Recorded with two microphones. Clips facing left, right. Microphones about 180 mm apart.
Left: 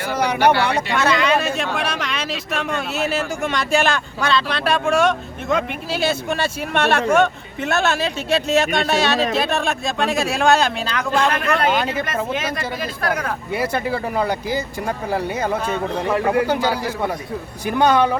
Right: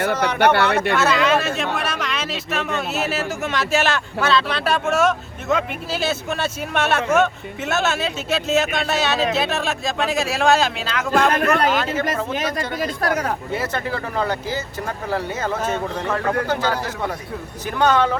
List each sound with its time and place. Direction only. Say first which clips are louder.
0.1 s speech: even; 10° left (ahead or behind)
0.5 s speech: right 1 dB; 60° right (ahead or behind)
0.9 s speech: left 3 dB; centre (ahead or behind)
11.3 s speech: right 1 dB; 40° right (ahead or behind)
11.7 s speech: left 1 dB; 15° left (ahead or behind)
12.0 s speech: even; 40° right (ahead or behind)
13.5 s speech: left 3 dB; 10° left (ahead or behind)